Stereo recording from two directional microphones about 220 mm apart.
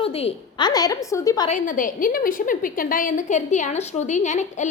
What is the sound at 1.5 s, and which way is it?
A woman's voice, 35° left (ahead or behind).